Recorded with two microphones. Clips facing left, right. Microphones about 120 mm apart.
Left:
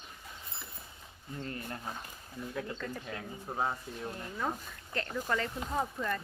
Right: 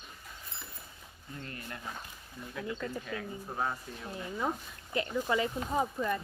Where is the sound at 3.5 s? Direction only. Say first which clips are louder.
Left 1 dB; 15° left (ahead or behind).